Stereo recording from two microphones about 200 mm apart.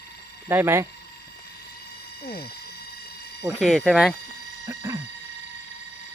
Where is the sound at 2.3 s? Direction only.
50° left (ahead or behind).